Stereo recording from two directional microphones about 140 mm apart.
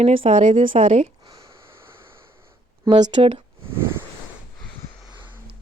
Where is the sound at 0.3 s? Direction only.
55° right (ahead or behind).